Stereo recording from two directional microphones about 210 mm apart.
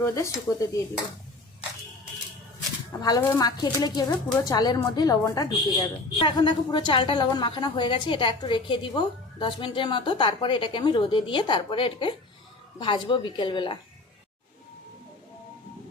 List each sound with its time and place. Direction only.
0.0 s speech: 15° left (ahead or behind)
3.0 s a woman's voice: 15° left (ahead or behind)